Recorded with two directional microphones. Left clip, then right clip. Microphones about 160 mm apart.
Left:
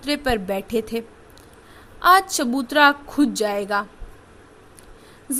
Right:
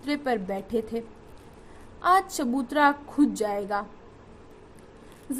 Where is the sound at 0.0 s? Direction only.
40° left (ahead or behind).